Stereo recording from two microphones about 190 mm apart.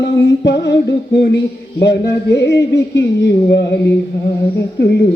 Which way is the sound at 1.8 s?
65° left (ahead or behind).